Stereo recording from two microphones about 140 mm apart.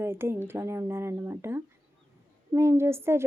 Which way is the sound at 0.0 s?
15° right (ahead or behind).